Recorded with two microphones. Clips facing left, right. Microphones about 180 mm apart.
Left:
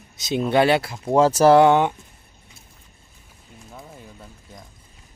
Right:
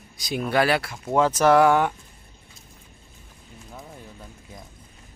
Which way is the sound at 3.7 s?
Centre (ahead or behind).